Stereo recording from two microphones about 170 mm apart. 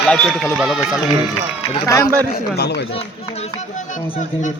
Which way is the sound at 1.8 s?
20° left (ahead or behind).